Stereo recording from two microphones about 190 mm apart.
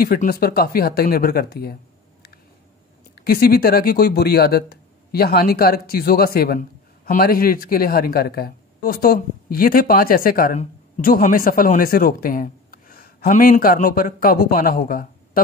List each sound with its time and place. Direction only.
0.0 s speech: 50° left (ahead or behind)
3.2 s speech: 55° left (ahead or behind)